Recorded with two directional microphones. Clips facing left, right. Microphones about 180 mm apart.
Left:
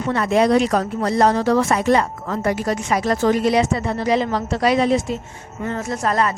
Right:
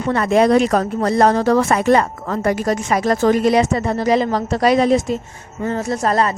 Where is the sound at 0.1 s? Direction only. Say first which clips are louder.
Right 3 dB; 50° right (ahead or behind).